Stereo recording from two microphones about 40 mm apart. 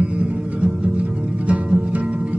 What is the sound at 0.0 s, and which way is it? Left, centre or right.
Music, right.